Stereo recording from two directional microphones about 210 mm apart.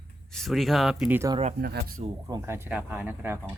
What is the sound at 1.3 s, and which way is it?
Speech, 30° right (ahead or behind).